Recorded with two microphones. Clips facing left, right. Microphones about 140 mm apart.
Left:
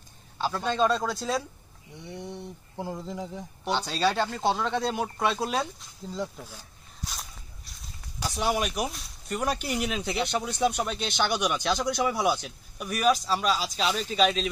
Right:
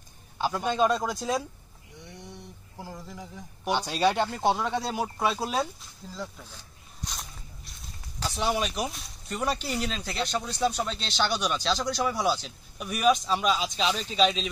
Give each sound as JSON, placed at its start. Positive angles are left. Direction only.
{"t": 0.4, "sound": "speech", "side_deg": -15}
{"t": 2.8, "sound": "speech", "side_deg": 25}
{"t": 3.6, "sound": "speech", "side_deg": -15}
{"t": 6.1, "sound": "speech", "side_deg": 20}
{"t": 8.2, "sound": "speech", "side_deg": 10}